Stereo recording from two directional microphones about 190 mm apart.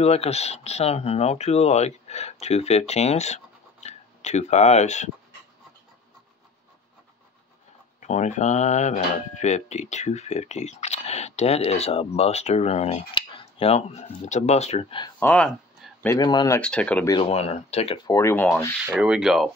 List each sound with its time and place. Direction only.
0.0 s speech: 35° left (ahead or behind)
8.0 s speech: 40° left (ahead or behind)
15.1 s a sound: 10° left (ahead or behind)
16.2 s speech: 20° left (ahead or behind)
16.6 s speech: 5° left (ahead or behind)
17.1 s speech: 30° left (ahead or behind); by 18.8 s 10° left (ahead or behind)
18.9 s speech: 5° right (ahead or behind)